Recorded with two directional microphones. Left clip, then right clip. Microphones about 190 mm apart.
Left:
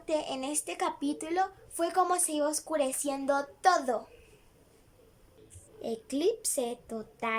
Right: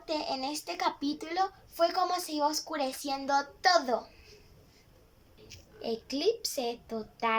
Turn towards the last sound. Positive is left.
turn(degrees=20)  # may be behind; listen again after turning